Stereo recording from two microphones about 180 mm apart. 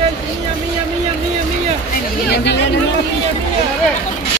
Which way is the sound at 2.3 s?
70° left (ahead or behind).